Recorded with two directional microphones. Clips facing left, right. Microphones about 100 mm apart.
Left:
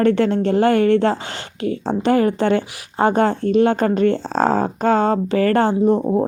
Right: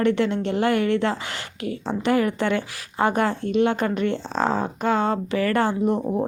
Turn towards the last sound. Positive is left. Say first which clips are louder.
# left 6 dB
turn(degrees=30)  # may be behind; listen again after turning